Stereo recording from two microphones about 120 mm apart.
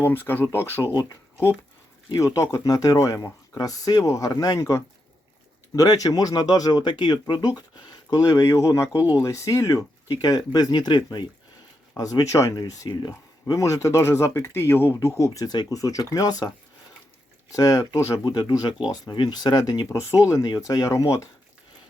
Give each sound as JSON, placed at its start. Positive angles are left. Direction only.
{"t": 0.0, "sound": "speech", "side_deg": 15}
{"t": 2.0, "sound": "speech", "side_deg": 25}
{"t": 17.5, "sound": "speech", "side_deg": 30}